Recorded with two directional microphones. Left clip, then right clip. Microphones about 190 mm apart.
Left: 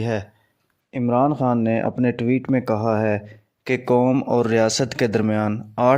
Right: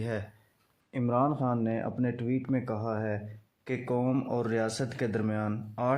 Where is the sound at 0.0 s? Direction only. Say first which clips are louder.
Left 10 dB; 40° left (ahead or behind).